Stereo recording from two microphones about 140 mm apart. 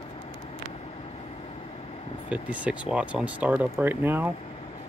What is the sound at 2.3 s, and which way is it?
Speech, 10° right (ahead or behind).